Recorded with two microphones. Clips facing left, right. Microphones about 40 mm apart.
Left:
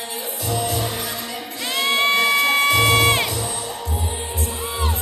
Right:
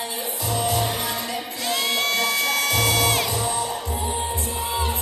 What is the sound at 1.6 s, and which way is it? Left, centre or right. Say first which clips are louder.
Crowd: left 5 dB; left.